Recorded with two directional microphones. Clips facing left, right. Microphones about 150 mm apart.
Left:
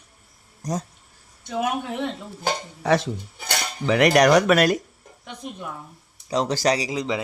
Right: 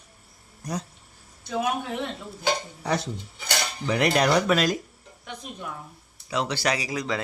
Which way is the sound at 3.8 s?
90° left.